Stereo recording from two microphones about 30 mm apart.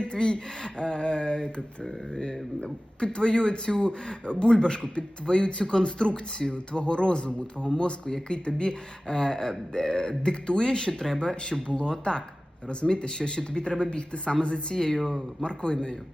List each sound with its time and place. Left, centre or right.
0.0 s speech: left
3.0 s a man's voice: left; by 15.2 s centre
15.4 s speech: left